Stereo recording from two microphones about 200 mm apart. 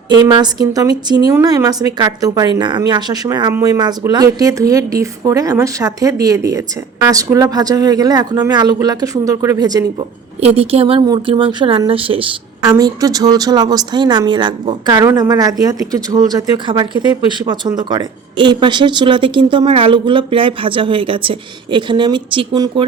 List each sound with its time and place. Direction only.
0.1 s speech: 20° right (ahead or behind)
10.4 s speech: 30° right (ahead or behind)